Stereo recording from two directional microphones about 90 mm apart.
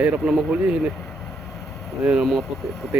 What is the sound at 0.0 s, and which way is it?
Speech, 15° right (ahead or behind).